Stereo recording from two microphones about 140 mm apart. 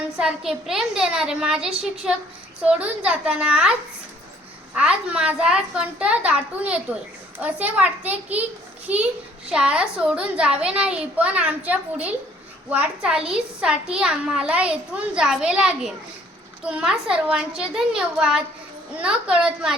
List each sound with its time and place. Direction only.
0.2 s a child's voice: 5° right (ahead or behind)